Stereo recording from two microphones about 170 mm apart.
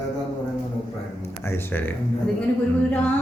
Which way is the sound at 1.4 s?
15° left (ahead or behind).